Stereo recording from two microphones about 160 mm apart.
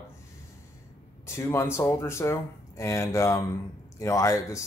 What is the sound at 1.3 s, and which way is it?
Speech, 15° left (ahead or behind).